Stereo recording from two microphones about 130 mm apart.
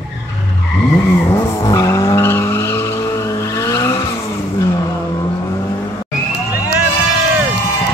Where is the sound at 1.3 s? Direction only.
25° left (ahead or behind).